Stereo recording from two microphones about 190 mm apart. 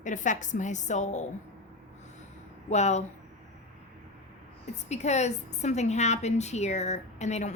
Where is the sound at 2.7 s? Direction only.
35° left (ahead or behind).